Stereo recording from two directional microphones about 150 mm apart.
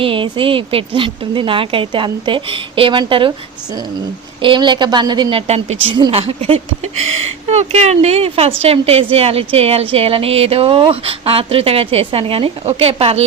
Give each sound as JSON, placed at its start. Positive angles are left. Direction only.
{"t": 0.0, "sound": "speech", "side_deg": -35}
{"t": 4.4, "sound": "a woman's voice", "side_deg": -35}
{"t": 5.5, "sound": "speech", "side_deg": -45}